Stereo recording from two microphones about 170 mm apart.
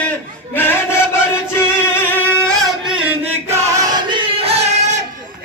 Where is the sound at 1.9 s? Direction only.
10° left (ahead or behind).